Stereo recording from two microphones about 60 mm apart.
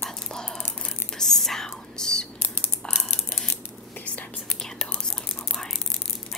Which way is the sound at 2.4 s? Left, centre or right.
Left.